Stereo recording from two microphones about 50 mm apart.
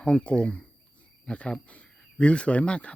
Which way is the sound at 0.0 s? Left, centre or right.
Left.